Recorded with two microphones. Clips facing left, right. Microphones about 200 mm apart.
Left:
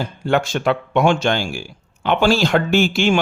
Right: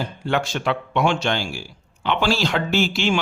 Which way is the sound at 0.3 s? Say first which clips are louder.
Left 5 dB; 50° left (ahead or behind).